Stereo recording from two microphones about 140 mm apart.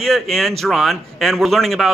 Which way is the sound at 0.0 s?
Centre (ahead or behind).